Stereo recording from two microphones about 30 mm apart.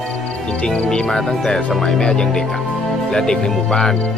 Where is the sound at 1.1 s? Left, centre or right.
Centre.